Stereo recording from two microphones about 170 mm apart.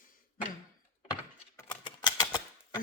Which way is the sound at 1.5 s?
15° left (ahead or behind).